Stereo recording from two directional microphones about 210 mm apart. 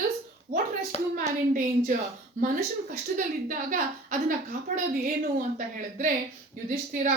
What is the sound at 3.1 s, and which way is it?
Speech, 40° right (ahead or behind).